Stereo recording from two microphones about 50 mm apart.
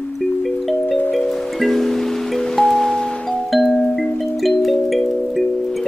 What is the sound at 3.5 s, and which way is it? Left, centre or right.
Music, centre.